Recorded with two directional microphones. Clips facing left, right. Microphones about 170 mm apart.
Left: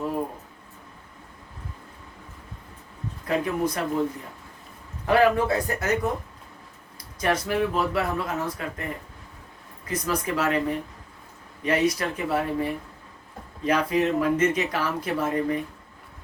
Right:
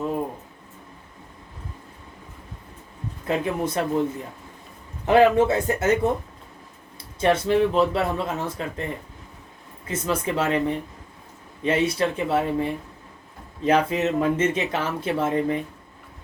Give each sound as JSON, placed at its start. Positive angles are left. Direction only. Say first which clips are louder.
{"t": 3.2, "sound": "speech", "louder": "even", "side_deg": -25}
{"t": 5.0, "sound": "speech", "louder": "right 4 dB", "side_deg": -20}
{"t": 7.2, "sound": "speech", "louder": "right 5 dB", "side_deg": -25}
{"t": 9.8, "sound": "speech", "louder": "right 2 dB", "side_deg": -25}